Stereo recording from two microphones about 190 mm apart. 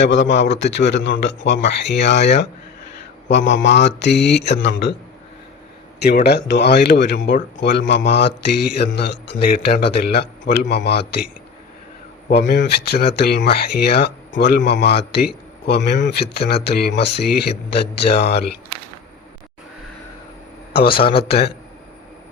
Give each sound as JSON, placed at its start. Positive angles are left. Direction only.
{"t": 0.0, "sound": "a man's voice", "side_deg": 70}
{"t": 6.0, "sound": "speech", "side_deg": 60}
{"t": 10.4, "sound": "a man's voice", "side_deg": 45}
{"t": 10.7, "sound": "speech", "side_deg": 60}
{"t": 12.6, "sound": "speech", "side_deg": 55}
{"t": 20.9, "sound": "a man's voice", "side_deg": 30}